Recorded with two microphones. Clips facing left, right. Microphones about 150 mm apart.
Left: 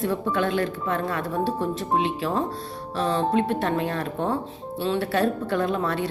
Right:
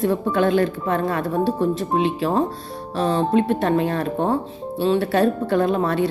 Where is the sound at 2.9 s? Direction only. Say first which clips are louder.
Right 4 dB; 45° right (ahead or behind).